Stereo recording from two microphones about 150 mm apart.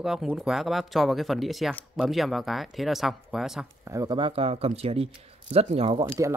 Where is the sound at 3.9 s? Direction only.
25° right (ahead or behind); by 6.0 s 40° right (ahead or behind).